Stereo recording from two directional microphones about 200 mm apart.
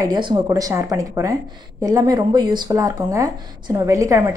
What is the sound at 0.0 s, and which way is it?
A woman's voice, 20° right (ahead or behind).